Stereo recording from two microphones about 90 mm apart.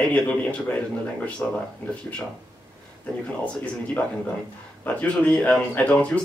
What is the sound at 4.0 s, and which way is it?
Speech, 15° left (ahead or behind).